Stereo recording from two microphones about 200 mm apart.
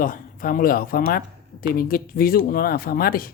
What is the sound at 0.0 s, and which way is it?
Speech, 45° left (ahead or behind).